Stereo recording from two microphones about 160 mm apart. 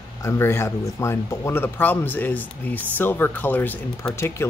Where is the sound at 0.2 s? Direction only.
20° left (ahead or behind).